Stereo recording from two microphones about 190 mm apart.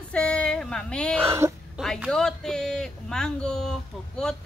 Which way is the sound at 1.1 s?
15° right (ahead or behind).